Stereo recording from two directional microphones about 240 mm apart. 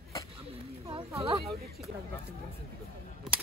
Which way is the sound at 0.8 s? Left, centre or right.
Right.